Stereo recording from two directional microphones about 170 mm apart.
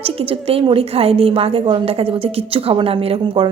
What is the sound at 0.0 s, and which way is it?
A woman's voice, 35° right (ahead or behind).